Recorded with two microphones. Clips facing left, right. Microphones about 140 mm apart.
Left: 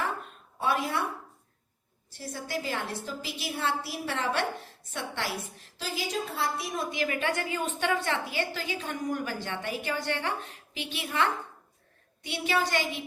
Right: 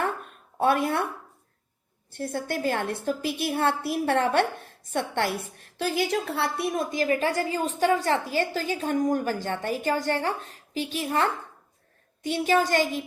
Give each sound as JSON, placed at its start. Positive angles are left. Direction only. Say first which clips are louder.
{"t": 0.6, "sound": "speech", "louder": "right 6 dB", "side_deg": -55}
{"t": 2.0, "sound": "a woman's voice", "louder": "right 8 dB", "side_deg": -55}